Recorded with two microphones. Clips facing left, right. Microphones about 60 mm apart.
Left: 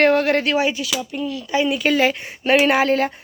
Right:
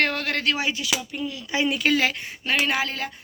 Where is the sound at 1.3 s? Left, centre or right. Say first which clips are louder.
Left 5 dB; centre.